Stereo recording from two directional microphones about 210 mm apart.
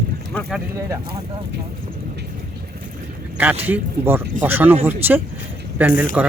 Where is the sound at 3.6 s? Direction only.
10° right (ahead or behind).